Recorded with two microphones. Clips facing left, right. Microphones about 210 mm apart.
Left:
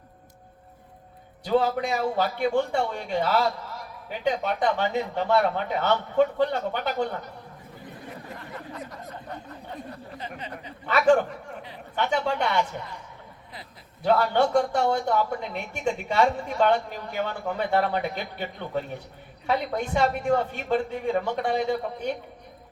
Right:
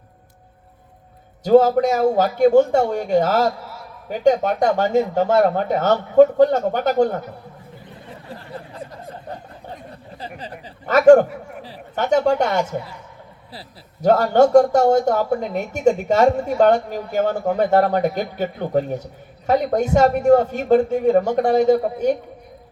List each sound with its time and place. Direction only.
1.5 s a man's voice: 45° right (ahead or behind)
8.3 s snicker: 30° right (ahead or behind)
11.6 s a man's voice: 40° right (ahead or behind)